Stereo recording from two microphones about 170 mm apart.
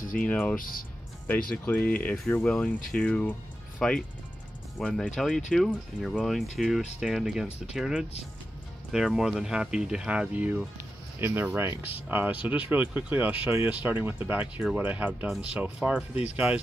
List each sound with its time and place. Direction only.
0.2 s speech: 10° left (ahead or behind)
0.6 s speech: 55° left (ahead or behind)
1.5 s speech: 10° left (ahead or behind); by 16.1 s 5° right (ahead or behind)